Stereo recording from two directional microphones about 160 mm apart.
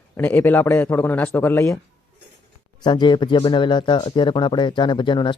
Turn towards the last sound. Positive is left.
turn(degrees=30)  # may be behind; listen again after turning